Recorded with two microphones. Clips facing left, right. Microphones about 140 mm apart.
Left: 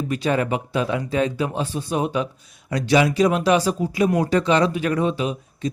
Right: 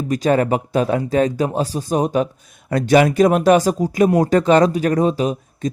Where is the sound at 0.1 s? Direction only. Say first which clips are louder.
Right 6 dB; 45° right (ahead or behind).